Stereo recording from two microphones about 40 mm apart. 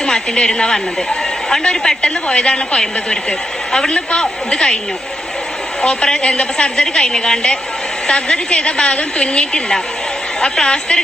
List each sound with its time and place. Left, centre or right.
0.0 s a woman's voice: left
5.8 s a woman's voice: left